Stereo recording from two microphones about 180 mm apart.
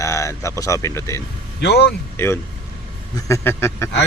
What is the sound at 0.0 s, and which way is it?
Speech, 15° left (ahead or behind).